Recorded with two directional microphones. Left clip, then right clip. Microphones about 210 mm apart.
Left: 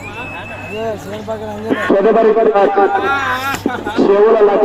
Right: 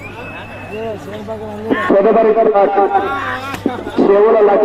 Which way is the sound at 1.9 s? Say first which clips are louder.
Even; 25° left (ahead or behind).